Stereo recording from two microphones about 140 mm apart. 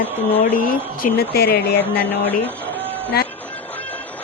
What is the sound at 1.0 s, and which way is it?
Speech, 70° left (ahead or behind).